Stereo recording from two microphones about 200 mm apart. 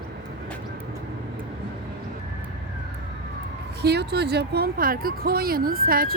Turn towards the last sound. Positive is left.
turn(degrees=-45)  # may be behind; listen again after turning